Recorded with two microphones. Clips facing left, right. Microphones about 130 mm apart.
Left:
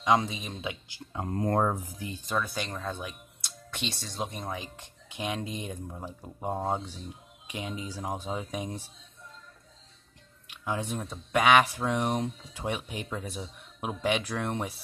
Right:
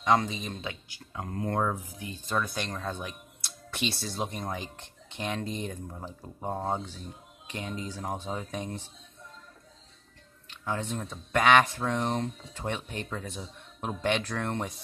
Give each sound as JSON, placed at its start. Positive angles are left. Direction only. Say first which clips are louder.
{"t": 0.0, "sound": "speech", "louder": "even", "side_deg": 5}
{"t": 1.1, "sound": "speech", "louder": "left 3 dB", "side_deg": 30}
{"t": 2.3, "sound": "speech", "louder": "right 1 dB", "side_deg": 5}
{"t": 10.5, "sound": "speech", "louder": "even", "side_deg": 10}